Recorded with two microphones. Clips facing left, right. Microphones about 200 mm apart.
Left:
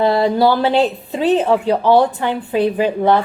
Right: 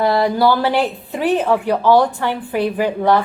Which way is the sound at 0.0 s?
25° left (ahead or behind).